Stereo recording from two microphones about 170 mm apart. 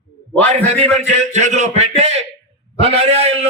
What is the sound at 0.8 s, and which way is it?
A man's voice, 40° right (ahead or behind).